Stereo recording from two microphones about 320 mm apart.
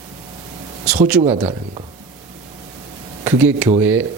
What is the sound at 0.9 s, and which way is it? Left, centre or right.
Speech, centre.